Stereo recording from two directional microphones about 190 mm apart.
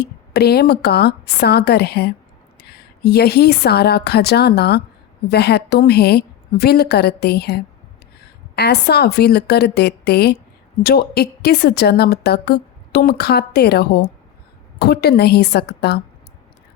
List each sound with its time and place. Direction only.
0.0 s a woman's voice: 55° left (ahead or behind)